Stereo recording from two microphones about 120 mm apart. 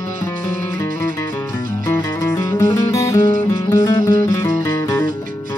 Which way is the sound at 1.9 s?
25° left (ahead or behind).